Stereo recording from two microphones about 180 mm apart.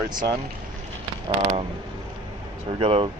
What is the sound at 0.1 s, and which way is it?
Speech, 25° right (ahead or behind).